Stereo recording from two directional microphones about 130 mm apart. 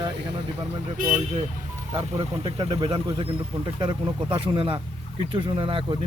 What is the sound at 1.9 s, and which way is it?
Speech, 45° right (ahead or behind).